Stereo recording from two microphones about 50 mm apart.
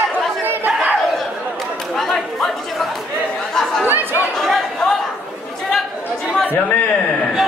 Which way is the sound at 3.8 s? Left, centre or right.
Right.